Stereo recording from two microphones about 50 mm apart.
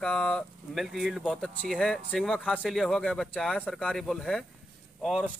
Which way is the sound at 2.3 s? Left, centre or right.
Left.